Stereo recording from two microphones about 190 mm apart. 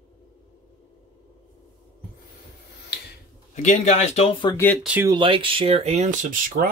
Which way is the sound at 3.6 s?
40° left (ahead or behind).